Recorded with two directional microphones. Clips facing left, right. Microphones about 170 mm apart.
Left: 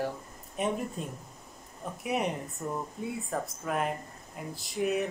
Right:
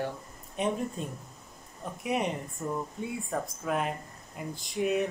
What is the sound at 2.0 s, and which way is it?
Speech, centre (ahead or behind).